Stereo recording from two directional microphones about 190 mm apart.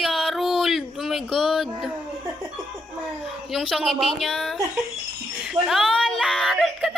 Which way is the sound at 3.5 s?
Centre (ahead or behind).